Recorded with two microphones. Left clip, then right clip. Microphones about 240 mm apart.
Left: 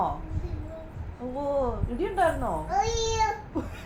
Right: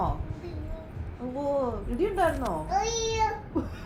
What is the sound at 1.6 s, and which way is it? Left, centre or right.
Speech, left.